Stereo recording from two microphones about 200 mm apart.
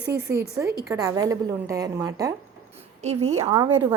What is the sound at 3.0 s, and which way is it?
Speech, 35° right (ahead or behind).